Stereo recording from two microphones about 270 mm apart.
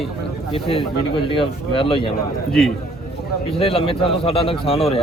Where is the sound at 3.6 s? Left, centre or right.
Left.